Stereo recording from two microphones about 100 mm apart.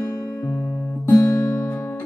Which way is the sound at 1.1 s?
30° left (ahead or behind).